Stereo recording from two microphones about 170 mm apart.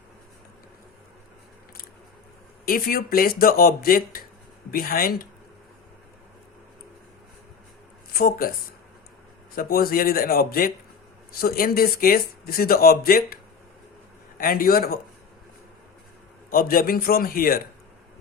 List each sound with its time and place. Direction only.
2.6 s speech: 60° left (ahead or behind)
8.1 s speech: 60° left (ahead or behind)
9.6 s speech: 60° left (ahead or behind)
16.5 s speech: 60° left (ahead or behind)